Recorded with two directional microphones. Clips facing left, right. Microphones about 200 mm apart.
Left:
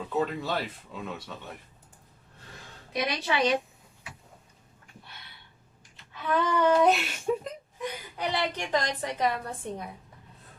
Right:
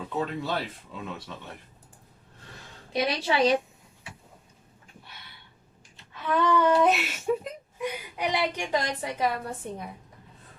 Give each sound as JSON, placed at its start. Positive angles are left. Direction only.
{"t": 0.3, "sound": "speech", "side_deg": 0}
{"t": 2.9, "sound": "a woman's voice", "side_deg": -30}
{"t": 6.3, "sound": "speech", "side_deg": 0}